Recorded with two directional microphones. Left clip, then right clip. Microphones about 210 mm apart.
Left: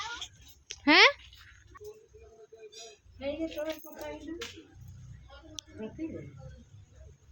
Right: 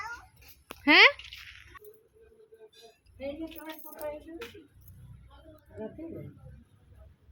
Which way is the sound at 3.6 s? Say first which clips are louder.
Left 9 dB; 20° right (ahead or behind).